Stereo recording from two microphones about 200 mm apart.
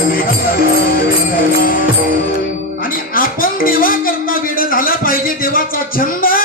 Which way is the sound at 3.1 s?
45° left (ahead or behind).